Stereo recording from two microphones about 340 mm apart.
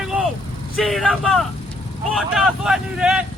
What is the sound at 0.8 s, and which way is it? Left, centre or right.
Speech, centre.